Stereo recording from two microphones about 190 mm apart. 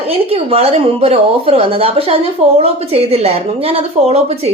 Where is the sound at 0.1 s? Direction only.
30° right (ahead or behind).